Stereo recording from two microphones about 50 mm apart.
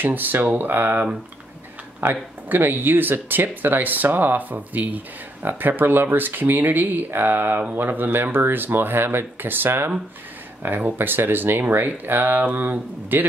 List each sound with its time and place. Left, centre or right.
0.0 s speech: right